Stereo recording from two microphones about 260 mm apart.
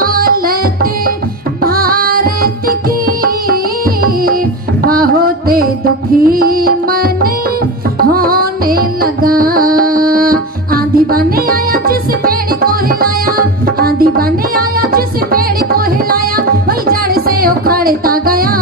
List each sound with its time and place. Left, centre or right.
0.0 s music: right
1.6 s music: right
4.8 s music: right